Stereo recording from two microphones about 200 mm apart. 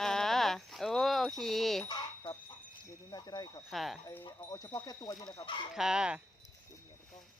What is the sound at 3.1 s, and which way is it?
Speech, 20° left (ahead or behind).